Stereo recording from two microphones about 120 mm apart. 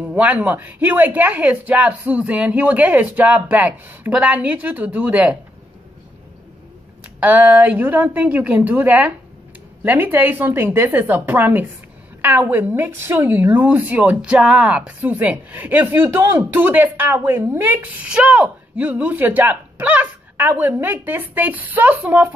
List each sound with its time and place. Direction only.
0.1 s a woman's voice: 15° right (ahead or behind)
7.2 s a woman's voice: 15° right (ahead or behind)